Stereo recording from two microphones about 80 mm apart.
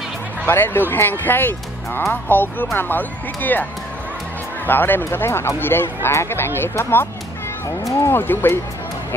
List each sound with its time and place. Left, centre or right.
0.5 s speech: left
4.6 s speech: left
8.1 s speech: left